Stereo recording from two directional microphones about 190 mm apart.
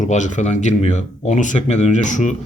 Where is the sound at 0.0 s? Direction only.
40° left (ahead or behind).